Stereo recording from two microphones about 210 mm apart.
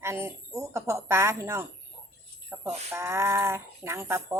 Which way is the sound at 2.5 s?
10° right (ahead or behind).